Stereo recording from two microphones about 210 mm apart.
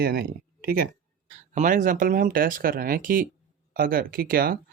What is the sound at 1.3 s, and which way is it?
Speech, 35° right (ahead or behind).